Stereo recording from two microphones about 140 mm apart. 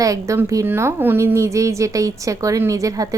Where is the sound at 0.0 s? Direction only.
20° right (ahead or behind).